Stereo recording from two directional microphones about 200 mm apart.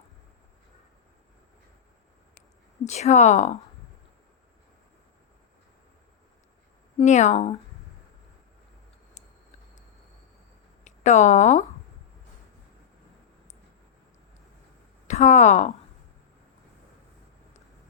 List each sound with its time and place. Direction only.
2.8 s speech: 35° left (ahead or behind)
6.9 s speech: 35° left (ahead or behind)
10.8 s speech: 35° left (ahead or behind)
15.0 s speech: 35° left (ahead or behind)